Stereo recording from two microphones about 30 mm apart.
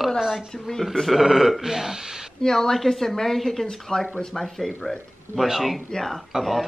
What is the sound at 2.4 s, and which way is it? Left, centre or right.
Speech, centre.